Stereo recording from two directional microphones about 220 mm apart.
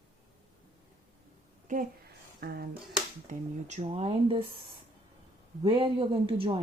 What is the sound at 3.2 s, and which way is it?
Speech, 30° right (ahead or behind).